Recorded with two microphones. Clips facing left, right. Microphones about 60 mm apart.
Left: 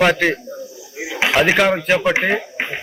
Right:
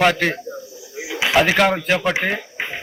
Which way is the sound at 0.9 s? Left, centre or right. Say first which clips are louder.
Left 2 dB; left.